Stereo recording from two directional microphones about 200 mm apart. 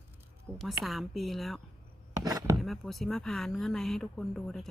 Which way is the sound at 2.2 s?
20° right (ahead or behind).